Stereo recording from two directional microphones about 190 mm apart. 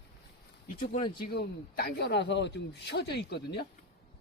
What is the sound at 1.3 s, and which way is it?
A man's voice, 55° left (ahead or behind).